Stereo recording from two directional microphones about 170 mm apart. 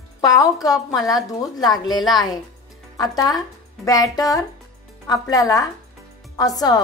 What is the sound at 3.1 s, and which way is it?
A woman's voice, 20° left (ahead or behind).